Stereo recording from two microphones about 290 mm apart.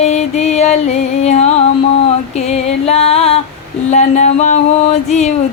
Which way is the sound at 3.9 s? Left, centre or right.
Left.